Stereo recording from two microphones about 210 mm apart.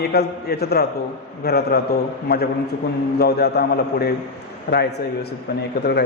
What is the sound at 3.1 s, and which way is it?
A man's voice, 50° left (ahead or behind).